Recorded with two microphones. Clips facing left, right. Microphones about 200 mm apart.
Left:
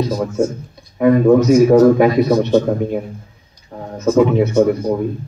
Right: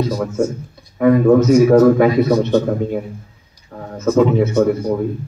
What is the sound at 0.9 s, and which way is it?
A man's voice, 15° left (ahead or behind).